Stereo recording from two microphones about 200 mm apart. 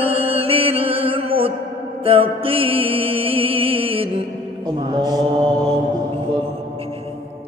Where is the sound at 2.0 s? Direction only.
25° right (ahead or behind).